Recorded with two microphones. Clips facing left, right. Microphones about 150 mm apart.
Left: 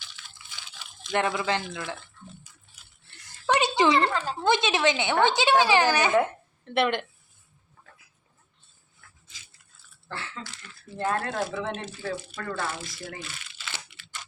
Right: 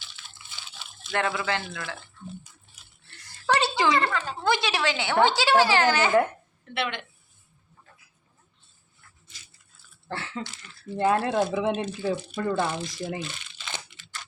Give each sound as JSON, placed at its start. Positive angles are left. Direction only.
{"t": 0.5, "sound": "speech", "side_deg": 15}
{"t": 3.4, "sound": "a sound", "side_deg": 15}
{"t": 4.4, "sound": "a woman's voice", "side_deg": 20}
{"t": 6.7, "sound": "speech", "side_deg": 50}
{"t": 10.1, "sound": "a sound", "side_deg": -25}
{"t": 10.9, "sound": "speech", "side_deg": -15}